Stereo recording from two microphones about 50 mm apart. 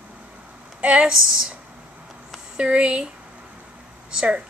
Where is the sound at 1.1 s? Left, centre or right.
Centre.